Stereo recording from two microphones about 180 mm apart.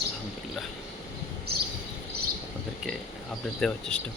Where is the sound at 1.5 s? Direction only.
60° right (ahead or behind).